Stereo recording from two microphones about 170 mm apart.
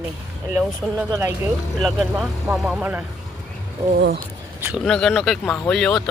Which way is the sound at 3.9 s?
85° right.